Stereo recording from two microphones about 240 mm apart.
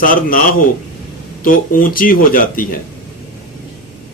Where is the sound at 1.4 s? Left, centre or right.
Left.